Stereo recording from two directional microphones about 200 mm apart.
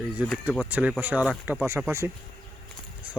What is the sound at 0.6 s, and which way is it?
Speech, 10° right (ahead or behind).